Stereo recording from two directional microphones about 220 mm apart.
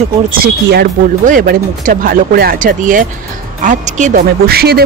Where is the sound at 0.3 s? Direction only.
45° right (ahead or behind).